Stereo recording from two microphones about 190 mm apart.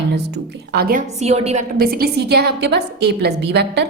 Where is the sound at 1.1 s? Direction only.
35° right (ahead or behind).